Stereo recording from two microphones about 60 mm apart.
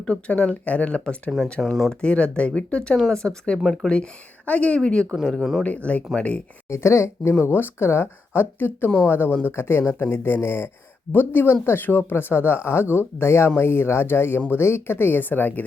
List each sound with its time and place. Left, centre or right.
0.1 s speech: left
4.4 s speech: left
5.2 s speech: centre
5.6 s speech: left
6.7 s speech: left